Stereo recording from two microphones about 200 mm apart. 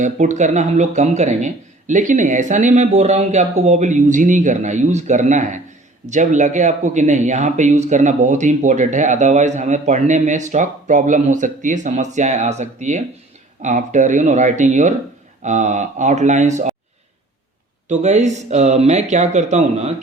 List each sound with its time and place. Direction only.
0.0 s speech: 35° right (ahead or behind)
17.8 s speech: 35° right (ahead or behind)